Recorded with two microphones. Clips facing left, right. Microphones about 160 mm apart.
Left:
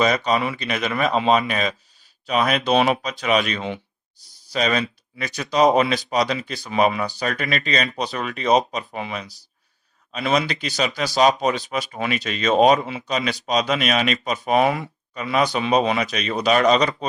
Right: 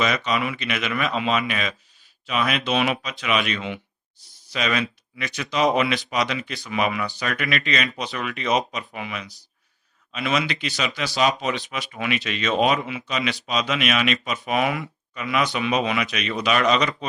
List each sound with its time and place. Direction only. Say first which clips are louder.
0.0 s speech: left 4 dB; 40° left (ahead or behind)